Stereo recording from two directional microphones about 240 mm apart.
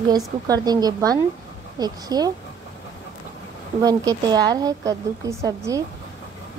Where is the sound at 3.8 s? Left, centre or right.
Centre.